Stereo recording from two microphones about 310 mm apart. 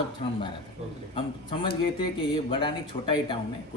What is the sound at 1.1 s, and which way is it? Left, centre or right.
A man's voice, centre.